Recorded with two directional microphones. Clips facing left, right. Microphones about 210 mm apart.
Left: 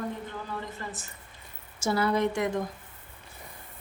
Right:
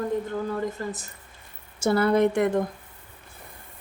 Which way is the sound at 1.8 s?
55° right (ahead or behind).